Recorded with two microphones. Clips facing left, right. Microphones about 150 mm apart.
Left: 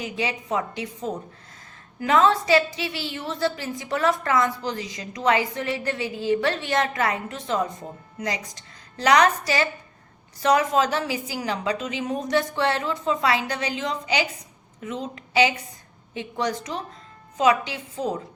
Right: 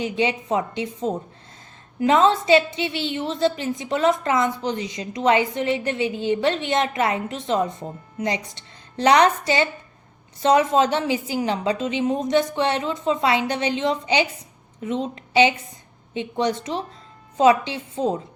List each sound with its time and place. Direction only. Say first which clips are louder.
0.0 s a woman's voice: right 6 dB; 25° right (ahead or behind)